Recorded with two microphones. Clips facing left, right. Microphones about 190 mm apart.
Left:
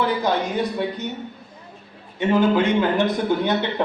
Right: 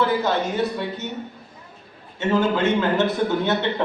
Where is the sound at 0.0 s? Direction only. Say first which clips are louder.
Even; 15° left (ahead or behind).